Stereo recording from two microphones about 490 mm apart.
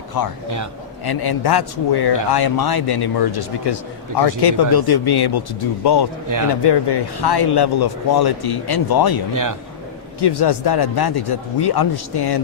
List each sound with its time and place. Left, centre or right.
0.4 s a man's voice: right
1.0 s speech: left
9.3 s a man's voice: right
10.2 s speech: left